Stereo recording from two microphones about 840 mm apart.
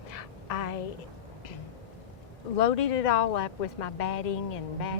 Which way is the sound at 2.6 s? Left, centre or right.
Left.